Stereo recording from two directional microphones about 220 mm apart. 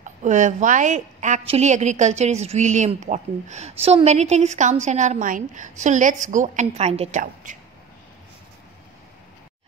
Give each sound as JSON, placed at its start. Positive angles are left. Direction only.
{"t": 0.0, "sound": "a woman's voice", "side_deg": -35}